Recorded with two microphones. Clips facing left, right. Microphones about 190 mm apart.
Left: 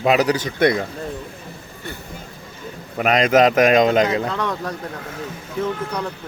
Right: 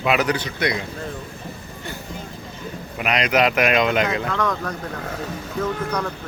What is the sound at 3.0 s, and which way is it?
A man's voice, 45° left (ahead or behind).